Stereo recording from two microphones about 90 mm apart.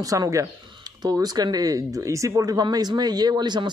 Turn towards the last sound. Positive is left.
turn(degrees=-55)  # may be behind; listen again after turning